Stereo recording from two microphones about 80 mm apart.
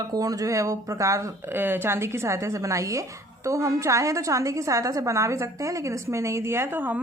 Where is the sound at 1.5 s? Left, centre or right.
Right.